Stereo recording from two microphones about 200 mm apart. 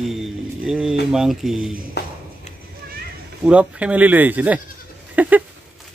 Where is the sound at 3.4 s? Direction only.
5° right (ahead or behind).